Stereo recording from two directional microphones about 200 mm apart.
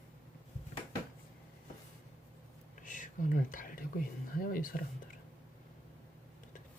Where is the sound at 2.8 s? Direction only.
40° left (ahead or behind).